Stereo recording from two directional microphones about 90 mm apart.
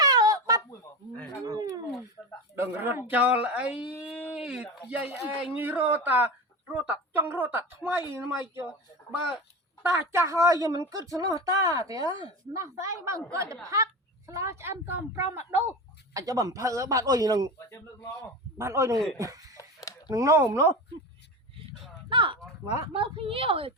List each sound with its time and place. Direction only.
0.0 s a sound: 45° right (ahead or behind)
2.2 s a sound: 20° left (ahead or behind)
2.6 s speech: 25° right (ahead or behind)
4.0 s a sound: 10° right (ahead or behind)
4.4 s speech: 10° right (ahead or behind); by 8.6 s 25° right (ahead or behind)
9.8 s a woman's voice: 30° right (ahead or behind)
16.1 s speech: 40° right (ahead or behind)
17.7 s a man's voice: 35° left (ahead or behind)
18.5 s a man's voice: 30° right (ahead or behind)
22.1 s speech: 65° right (ahead or behind)
22.9 s a woman's voice: 85° right